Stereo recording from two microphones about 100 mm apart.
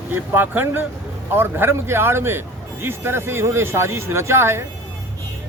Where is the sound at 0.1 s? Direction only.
20° right (ahead or behind).